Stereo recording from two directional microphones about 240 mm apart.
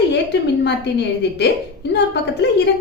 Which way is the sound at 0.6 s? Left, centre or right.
Left.